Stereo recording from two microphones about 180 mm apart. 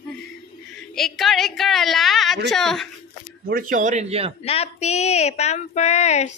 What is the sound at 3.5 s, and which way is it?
Speech, 50° right (ahead or behind).